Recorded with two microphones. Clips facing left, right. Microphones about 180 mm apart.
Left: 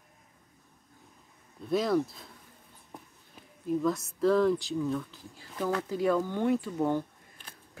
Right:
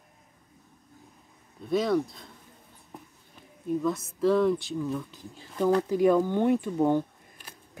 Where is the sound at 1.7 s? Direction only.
Centre (ahead or behind).